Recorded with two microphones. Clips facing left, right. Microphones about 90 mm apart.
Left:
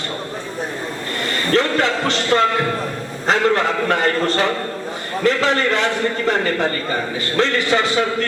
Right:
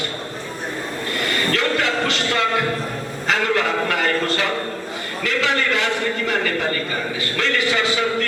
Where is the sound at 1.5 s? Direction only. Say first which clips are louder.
Left 6 dB; 35° left (ahead or behind).